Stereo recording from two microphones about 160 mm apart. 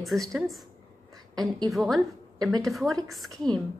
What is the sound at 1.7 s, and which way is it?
A woman's voice, centre (ahead or behind).